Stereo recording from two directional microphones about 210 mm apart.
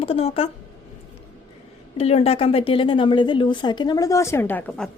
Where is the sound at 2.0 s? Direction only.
30° left (ahead or behind); by 4.9 s 5° left (ahead or behind).